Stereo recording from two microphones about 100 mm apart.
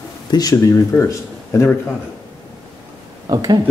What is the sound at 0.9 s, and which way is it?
Speech, 25° left (ahead or behind).